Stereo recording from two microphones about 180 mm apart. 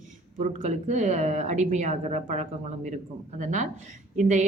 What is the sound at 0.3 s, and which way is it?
A woman's voice, 45° right (ahead or behind).